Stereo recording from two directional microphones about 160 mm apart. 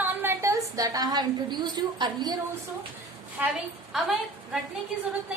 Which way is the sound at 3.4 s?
10° right (ahead or behind).